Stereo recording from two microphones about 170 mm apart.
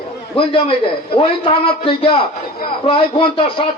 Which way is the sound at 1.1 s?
30° left (ahead or behind).